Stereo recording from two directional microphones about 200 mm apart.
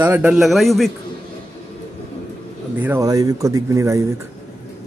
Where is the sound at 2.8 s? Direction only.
15° right (ahead or behind).